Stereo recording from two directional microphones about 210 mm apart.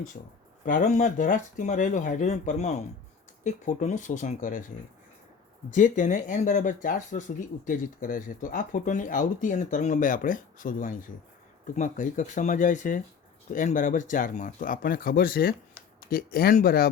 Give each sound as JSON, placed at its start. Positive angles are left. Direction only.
{"t": 0.2, "sound": "speech", "side_deg": 40}
{"t": 5.7, "sound": "speech", "side_deg": 35}